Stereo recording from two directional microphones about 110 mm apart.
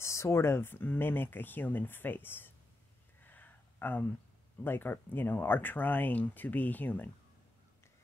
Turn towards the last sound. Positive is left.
turn(degrees=15)  # may be behind; listen again after turning